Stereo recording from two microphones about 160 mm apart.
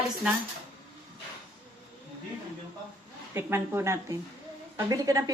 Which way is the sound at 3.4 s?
15° right (ahead or behind).